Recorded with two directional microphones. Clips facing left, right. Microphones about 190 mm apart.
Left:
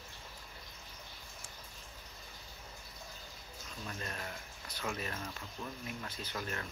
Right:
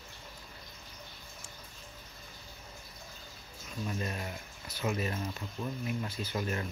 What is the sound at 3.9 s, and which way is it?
Speech, 15° right (ahead or behind).